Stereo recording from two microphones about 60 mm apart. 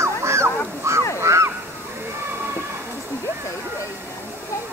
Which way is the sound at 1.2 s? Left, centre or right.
Right.